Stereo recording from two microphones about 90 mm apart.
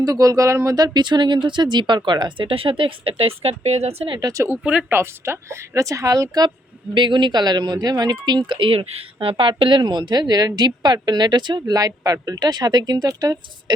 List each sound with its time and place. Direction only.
0.0 s speech: 40° right (ahead or behind)
0.9 s speech: 55° right (ahead or behind)
2.5 s speech: 85° right
4.2 s speech: 40° right (ahead or behind)
4.6 s speech: 10° right (ahead or behind)
4.9 s speech: 25° right (ahead or behind); by 6.5 s 45° right (ahead or behind)
6.9 s speech: 60° right (ahead or behind); by 13.7 s 45° right (ahead or behind)